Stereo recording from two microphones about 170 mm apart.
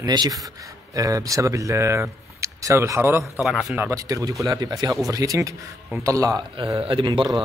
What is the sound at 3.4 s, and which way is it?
Speech, 5° right (ahead or behind).